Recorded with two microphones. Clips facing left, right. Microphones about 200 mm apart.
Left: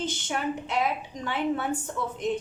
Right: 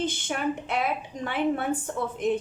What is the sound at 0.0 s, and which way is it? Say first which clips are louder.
A woman's voice: right 2 dB; 55° right (ahead or behind).